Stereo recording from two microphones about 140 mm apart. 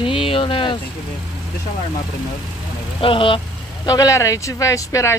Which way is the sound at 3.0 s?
40° left (ahead or behind).